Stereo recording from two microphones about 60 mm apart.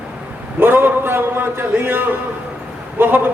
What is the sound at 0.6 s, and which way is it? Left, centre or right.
A man's voice, right.